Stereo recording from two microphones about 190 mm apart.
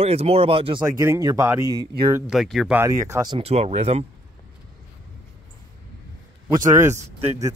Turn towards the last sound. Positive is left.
turn(degrees=-15)  # may be behind; listen again after turning